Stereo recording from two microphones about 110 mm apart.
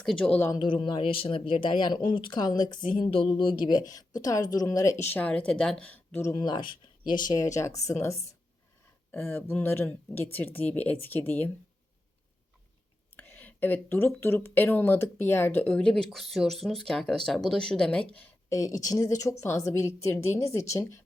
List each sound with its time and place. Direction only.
0.0 s speech: 5° left (ahead or behind)
0.6 s speech: 45° left (ahead or behind)
3.1 s speech: 50° left (ahead or behind); by 6.3 s 15° left (ahead or behind)
6.3 s speech: 40° left (ahead or behind); by 11.5 s 20° left (ahead or behind)
13.1 s speech: 15° left (ahead or behind)
15.7 s speech: 5° left (ahead or behind)
18.4 s speech: 30° left (ahead or behind)